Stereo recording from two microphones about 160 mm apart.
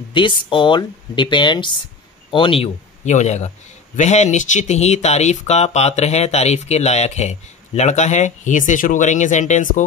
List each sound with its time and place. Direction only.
0.1 s a man's voice: 30° left (ahead or behind); by 9.8 s 50° left (ahead or behind)